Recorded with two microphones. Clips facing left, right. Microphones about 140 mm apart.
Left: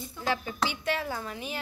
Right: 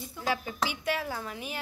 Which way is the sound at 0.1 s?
5° right (ahead or behind).